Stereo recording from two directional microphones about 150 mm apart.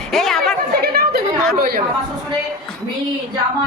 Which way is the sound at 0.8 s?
90° right.